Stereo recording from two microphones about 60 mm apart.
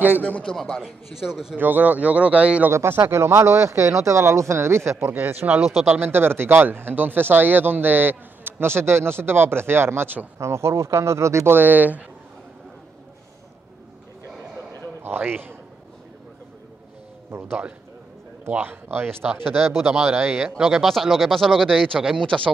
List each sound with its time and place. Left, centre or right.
0.7 s a man's voice: centre
1.6 s speech: right
2.7 s speech: right
5.1 s speech: right
5.6 s speech: centre
5.9 s speech: right
10.4 s speech: right
11.5 s speech: right
15.0 s a man's voice: right
17.3 s speech: right
19.4 s speech: centre
20.1 s speech: right
20.4 s a man's voice: centre
20.8 s speech: centre